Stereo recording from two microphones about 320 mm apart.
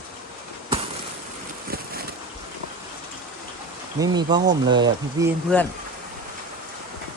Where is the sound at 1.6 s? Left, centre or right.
Right.